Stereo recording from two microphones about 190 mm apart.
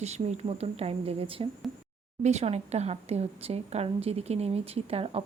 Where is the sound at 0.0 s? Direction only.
35° right (ahead or behind).